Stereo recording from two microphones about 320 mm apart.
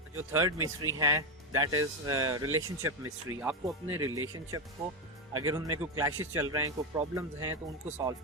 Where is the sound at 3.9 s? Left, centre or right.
Right.